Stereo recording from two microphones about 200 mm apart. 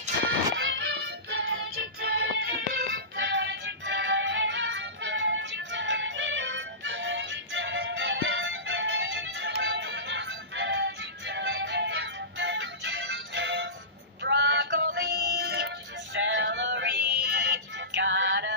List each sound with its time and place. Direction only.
0.2 s music: 65° right (ahead or behind)
14.2 s male singing: 65° right (ahead or behind)